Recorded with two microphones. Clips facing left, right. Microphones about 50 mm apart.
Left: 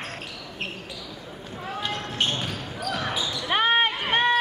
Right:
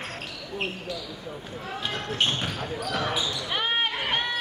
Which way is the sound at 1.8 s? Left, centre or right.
Centre.